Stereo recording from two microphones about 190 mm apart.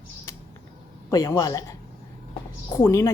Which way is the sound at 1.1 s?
20° left (ahead or behind).